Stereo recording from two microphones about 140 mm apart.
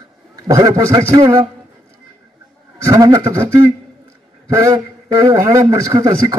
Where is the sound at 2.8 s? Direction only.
25° right (ahead or behind).